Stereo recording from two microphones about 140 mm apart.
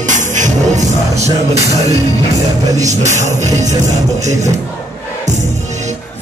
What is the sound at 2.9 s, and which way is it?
Music, 55° right (ahead or behind).